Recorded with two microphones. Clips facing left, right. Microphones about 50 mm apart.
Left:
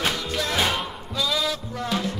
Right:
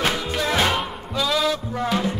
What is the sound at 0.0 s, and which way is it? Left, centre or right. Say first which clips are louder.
Music: right 3 dB; centre.